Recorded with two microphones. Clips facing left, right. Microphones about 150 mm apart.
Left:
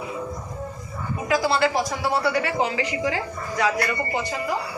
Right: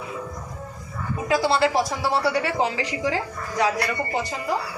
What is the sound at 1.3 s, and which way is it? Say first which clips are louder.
Speech: right 1 dB; 30° right (ahead or behind).